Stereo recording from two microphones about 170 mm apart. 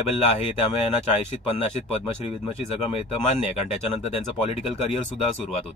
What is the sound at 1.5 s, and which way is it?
Speech, 40° left (ahead or behind).